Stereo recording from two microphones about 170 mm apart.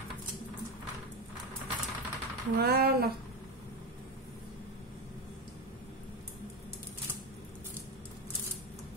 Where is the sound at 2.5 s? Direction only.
65° right (ahead or behind).